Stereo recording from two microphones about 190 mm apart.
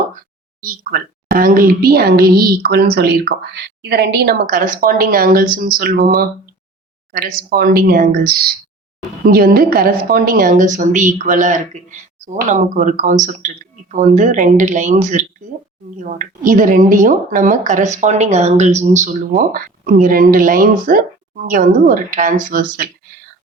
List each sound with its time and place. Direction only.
0.6 s a woman's voice: 50° right (ahead or behind)